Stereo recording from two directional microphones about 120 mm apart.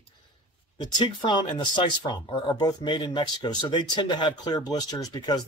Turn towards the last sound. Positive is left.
turn(degrees=35)  # may be behind; listen again after turning